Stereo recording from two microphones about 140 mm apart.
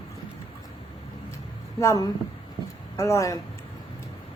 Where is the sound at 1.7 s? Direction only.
25° left (ahead or behind).